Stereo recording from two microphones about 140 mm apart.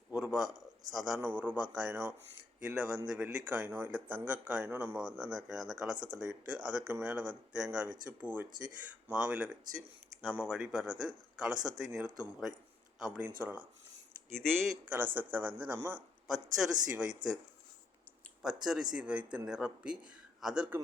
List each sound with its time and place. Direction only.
0.1 s a sound: 10° right (ahead or behind)
0.9 s speech: 5° right (ahead or behind)
14.3 s speech: 5° left (ahead or behind)
14.9 s speech: 15° right (ahead or behind)
16.2 s speech: 5° right (ahead or behind)
17.2 s speech: 25° right (ahead or behind)
18.4 s speech: 5° right (ahead or behind)